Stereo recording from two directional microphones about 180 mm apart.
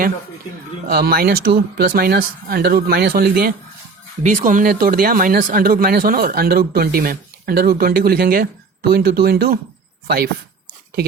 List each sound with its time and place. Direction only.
0.9 s speech: 60° right (ahead or behind)
4.2 s speech: 40° right (ahead or behind); by 9.6 s 55° right (ahead or behind)